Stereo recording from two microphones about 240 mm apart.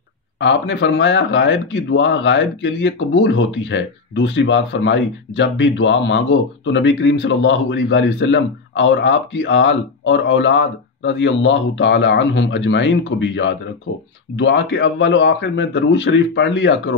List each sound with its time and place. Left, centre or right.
0.4 s speech: left